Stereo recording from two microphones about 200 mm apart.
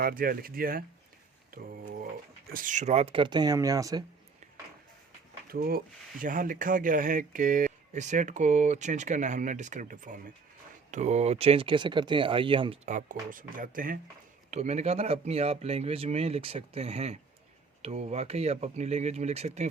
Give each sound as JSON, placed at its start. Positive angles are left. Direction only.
{"t": 0.0, "sound": "speech", "side_deg": -45}
{"t": 5.5, "sound": "speech", "side_deg": -45}